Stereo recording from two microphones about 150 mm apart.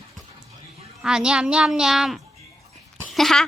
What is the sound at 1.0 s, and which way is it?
A woman's voice, 5° right (ahead or behind).